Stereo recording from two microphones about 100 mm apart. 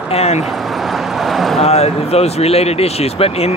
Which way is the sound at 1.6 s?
90° left.